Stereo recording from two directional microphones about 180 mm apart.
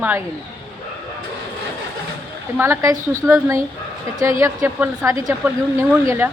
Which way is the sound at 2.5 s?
15° right (ahead or behind).